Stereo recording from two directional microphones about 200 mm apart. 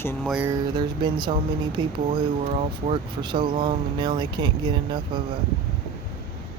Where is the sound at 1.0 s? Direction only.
25° right (ahead or behind).